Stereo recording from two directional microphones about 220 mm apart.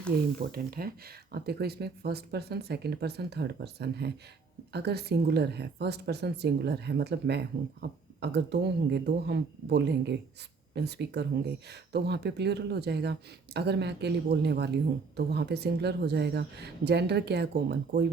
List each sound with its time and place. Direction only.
0.3 s speech: 45° right (ahead or behind)